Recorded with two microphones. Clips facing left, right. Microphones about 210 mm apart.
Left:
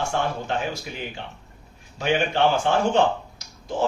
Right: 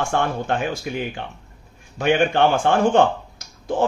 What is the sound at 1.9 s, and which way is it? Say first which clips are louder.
Speech: right 5 dB; 55° right (ahead or behind).